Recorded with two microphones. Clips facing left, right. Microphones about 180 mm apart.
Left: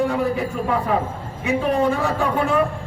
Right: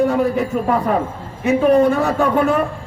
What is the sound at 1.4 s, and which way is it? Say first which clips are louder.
Speech: right 7 dB; 40° right (ahead or behind).